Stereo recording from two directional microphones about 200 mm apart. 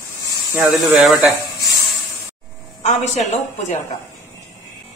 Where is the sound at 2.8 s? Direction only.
35° left (ahead or behind).